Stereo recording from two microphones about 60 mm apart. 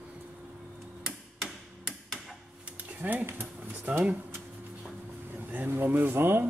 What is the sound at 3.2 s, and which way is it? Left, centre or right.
Speech, right.